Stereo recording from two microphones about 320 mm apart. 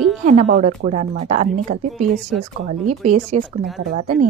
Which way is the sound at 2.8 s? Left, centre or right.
Right.